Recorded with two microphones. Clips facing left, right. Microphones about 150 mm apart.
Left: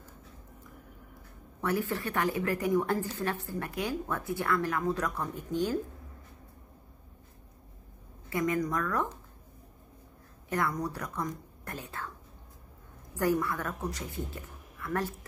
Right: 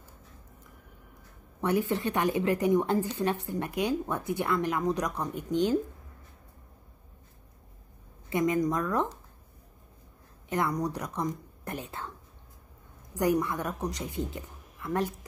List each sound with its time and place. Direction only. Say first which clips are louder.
1.6 s speech: right 4 dB; 20° right (ahead or behind)
8.3 s speech: right 3 dB; 20° right (ahead or behind)
10.5 s speech: right 2 dB; 20° right (ahead or behind)
13.1 s speech: right 2 dB; 20° right (ahead or behind)